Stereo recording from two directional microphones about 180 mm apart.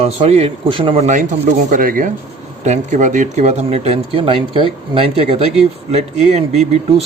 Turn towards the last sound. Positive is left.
turn(degrees=-35)  # may be behind; listen again after turning